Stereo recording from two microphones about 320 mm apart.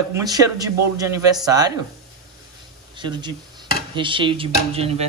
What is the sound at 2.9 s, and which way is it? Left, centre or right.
Speech, centre.